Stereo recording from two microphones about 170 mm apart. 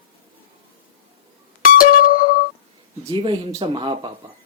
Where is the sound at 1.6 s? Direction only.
55° left (ahead or behind).